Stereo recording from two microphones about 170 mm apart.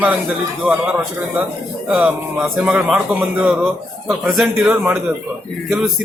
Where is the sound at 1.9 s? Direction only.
10° right (ahead or behind).